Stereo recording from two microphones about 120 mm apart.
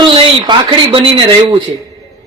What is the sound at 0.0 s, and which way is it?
A woman's voice, 40° right (ahead or behind).